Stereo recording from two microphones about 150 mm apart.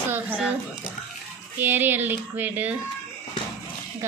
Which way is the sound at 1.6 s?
15° right (ahead or behind).